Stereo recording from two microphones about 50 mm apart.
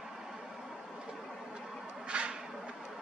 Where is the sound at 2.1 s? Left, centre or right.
Right.